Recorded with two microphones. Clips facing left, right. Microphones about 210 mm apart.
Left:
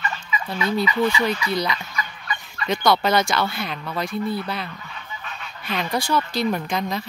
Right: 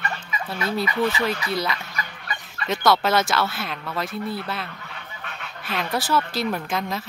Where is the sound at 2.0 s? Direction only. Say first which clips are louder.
Left 2 dB; 45° right (ahead or behind).